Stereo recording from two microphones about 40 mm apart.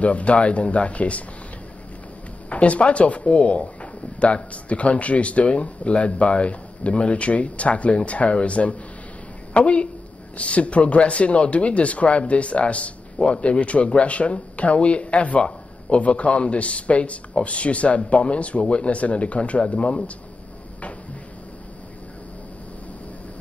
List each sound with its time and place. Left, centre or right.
0.0 s speech: left
2.5 s a woman's voice: left